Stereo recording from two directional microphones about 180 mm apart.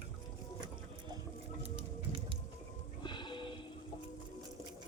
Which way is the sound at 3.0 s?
25° left (ahead or behind).